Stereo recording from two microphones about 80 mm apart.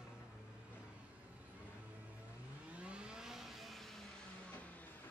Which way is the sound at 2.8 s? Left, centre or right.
Centre.